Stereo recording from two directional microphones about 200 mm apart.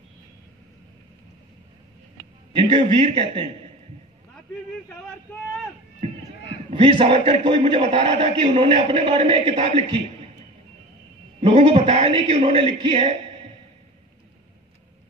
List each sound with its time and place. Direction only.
2.7 s a man's voice: 25° right (ahead or behind)
6.7 s a man's voice: 25° right (ahead or behind)
11.4 s a man's voice: 30° right (ahead or behind)